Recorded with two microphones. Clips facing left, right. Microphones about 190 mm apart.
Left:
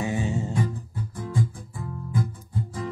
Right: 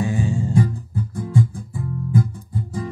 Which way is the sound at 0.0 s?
20° left (ahead or behind).